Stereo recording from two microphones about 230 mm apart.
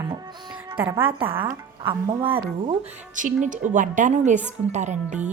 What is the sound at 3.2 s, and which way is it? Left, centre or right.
A woman's voice, right.